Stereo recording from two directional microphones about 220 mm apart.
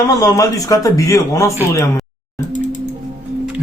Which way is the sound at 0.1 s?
15° left (ahead or behind).